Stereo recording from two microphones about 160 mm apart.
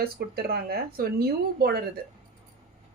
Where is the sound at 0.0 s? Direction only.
75° right (ahead or behind).